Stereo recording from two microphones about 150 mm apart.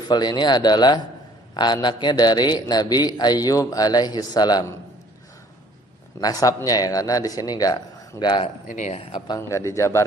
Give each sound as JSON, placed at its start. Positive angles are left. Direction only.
{"t": 0.0, "sound": "a man's voice", "side_deg": 30}
{"t": 6.1, "sound": "a man's voice", "side_deg": 25}
{"t": 8.6, "sound": "speech", "side_deg": 55}
{"t": 9.0, "sound": "a man's voice", "side_deg": 30}